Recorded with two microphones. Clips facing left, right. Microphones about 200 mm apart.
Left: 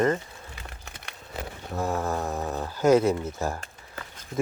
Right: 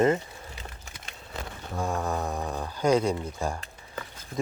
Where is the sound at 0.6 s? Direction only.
60° left (ahead or behind).